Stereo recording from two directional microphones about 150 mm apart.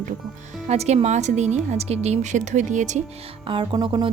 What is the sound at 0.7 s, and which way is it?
Speech, 45° right (ahead or behind).